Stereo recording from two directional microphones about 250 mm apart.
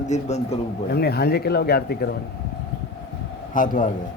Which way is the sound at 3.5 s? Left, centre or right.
Left.